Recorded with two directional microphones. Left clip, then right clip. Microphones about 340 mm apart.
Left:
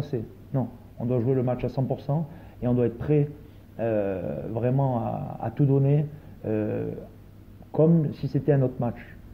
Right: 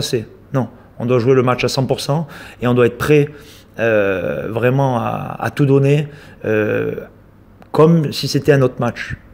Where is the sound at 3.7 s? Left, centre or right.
Right.